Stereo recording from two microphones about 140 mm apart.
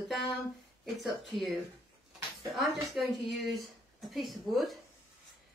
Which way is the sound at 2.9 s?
Centre (ahead or behind).